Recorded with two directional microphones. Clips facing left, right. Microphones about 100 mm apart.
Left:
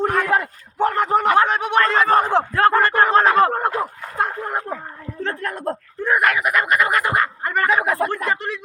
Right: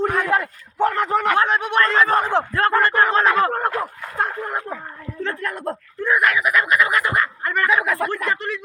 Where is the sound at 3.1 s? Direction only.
40° left (ahead or behind).